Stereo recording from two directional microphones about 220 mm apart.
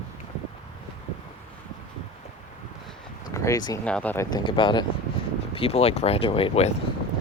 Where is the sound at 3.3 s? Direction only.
15° left (ahead or behind).